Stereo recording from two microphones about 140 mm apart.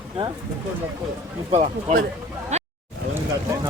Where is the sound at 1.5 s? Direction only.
55° right (ahead or behind).